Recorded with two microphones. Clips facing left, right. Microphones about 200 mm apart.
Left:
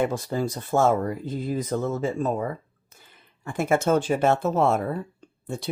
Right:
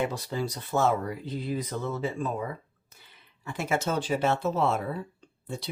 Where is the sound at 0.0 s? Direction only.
50° left (ahead or behind).